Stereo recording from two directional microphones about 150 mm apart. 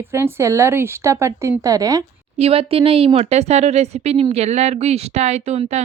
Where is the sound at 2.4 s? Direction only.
40° right (ahead or behind).